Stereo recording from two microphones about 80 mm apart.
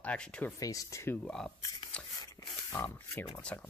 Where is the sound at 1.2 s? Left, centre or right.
Centre.